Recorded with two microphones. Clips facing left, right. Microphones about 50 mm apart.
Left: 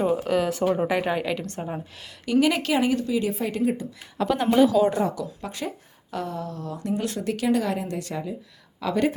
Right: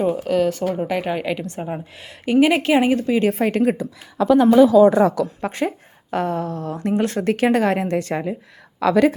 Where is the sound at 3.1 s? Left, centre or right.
Right.